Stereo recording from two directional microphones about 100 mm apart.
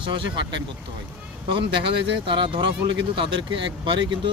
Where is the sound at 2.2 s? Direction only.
60° right (ahead or behind).